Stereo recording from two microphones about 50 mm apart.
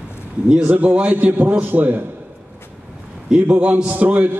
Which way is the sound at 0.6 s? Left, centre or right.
Right.